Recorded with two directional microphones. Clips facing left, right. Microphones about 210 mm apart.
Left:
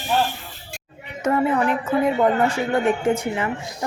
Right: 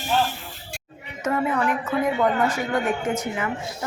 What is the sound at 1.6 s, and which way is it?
A woman's voice, 30° left (ahead or behind).